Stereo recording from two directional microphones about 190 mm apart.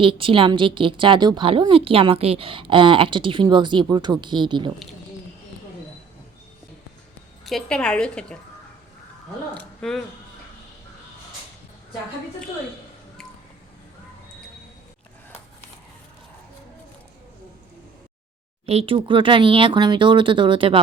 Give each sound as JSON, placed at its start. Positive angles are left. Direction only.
{"t": 0.0, "sound": "a woman's voice", "side_deg": -25}
{"t": 7.4, "sound": "a woman's voice", "side_deg": 5}
{"t": 9.6, "sound": "speech", "side_deg": 0}
{"t": 18.6, "sound": "a woman's voice", "side_deg": -30}